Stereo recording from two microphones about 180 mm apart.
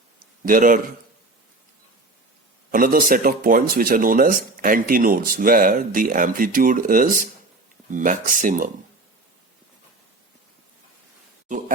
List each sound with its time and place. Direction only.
0.4 s speech: 50° right (ahead or behind)
2.7 s speech: 50° right (ahead or behind)